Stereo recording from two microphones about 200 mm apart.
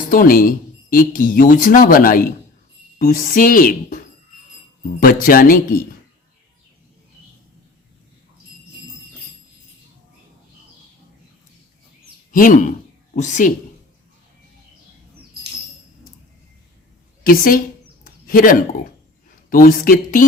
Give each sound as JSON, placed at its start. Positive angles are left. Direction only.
{"t": 0.0, "sound": "speech", "side_deg": 45}
{"t": 12.3, "sound": "speech", "side_deg": 40}
{"t": 17.2, "sound": "speech", "side_deg": 45}
{"t": 18.0, "sound": "a sound", "side_deg": 45}
{"t": 19.5, "sound": "speech", "side_deg": 45}